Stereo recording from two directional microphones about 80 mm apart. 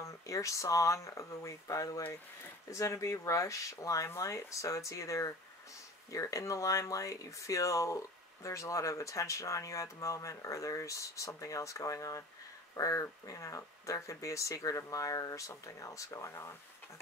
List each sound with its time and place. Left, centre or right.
0.0 s speech: left